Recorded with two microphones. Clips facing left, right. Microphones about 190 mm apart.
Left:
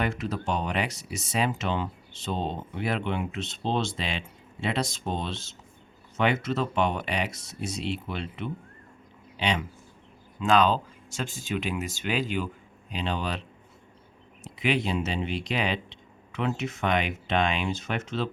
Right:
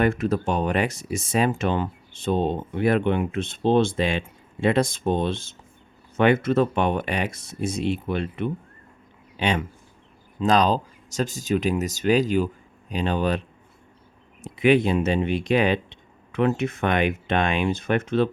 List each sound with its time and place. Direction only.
0.0 s speech: 50° right (ahead or behind)
10.4 s speech: 40° right (ahead or behind)
14.4 s speech: 55° right (ahead or behind)